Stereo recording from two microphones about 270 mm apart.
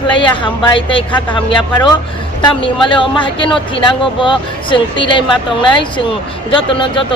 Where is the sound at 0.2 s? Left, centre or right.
Centre.